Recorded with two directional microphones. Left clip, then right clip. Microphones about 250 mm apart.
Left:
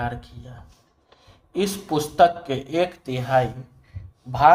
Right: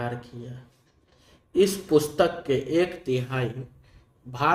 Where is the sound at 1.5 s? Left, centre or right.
Centre.